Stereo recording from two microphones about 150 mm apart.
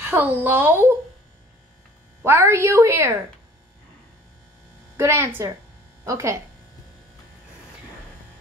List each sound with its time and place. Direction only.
0.0 s a woman's voice: 15° right (ahead or behind)
2.2 s a woman's voice: 15° right (ahead or behind)
4.9 s a woman's voice: 15° right (ahead or behind)